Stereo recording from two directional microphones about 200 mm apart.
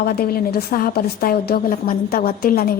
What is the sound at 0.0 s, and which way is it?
A woman's voice, 45° left (ahead or behind).